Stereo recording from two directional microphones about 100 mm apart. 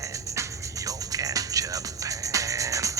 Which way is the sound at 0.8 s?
35° right (ahead or behind).